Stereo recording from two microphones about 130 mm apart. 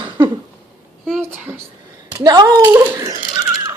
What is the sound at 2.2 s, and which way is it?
Speech, 30° right (ahead or behind).